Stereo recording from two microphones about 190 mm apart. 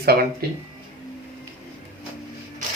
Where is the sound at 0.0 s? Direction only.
55° right (ahead or behind).